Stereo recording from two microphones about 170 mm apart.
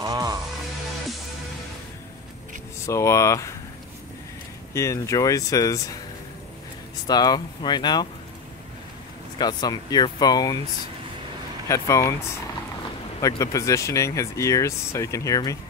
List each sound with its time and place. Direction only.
0.0 s music: 25° right (ahead or behind)
2.9 s speech: 15° left (ahead or behind)
4.7 s speech: 15° left (ahead or behind)
7.1 s speech: 25° left (ahead or behind)
9.4 s speech: 25° left (ahead or behind)
11.6 s speech: 20° left (ahead or behind)
13.2 s speech: 20° left (ahead or behind)